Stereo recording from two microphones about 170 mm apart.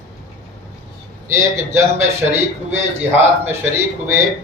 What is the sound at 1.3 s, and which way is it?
Speech, 15° right (ahead or behind).